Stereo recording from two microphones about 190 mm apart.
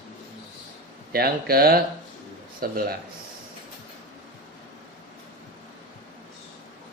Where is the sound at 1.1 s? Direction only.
55° right (ahead or behind).